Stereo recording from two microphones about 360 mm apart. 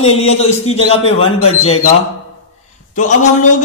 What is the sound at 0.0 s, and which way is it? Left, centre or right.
A man's voice, centre.